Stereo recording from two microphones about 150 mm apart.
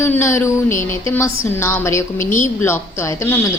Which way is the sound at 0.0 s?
15° left (ahead or behind).